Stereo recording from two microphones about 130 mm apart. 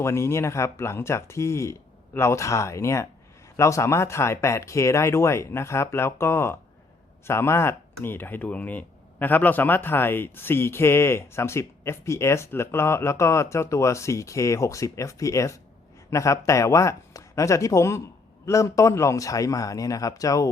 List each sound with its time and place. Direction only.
0.0 s a man's voice: 20° left (ahead or behind)